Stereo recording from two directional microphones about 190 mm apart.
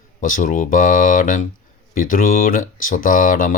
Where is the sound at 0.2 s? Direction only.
45° left (ahead or behind).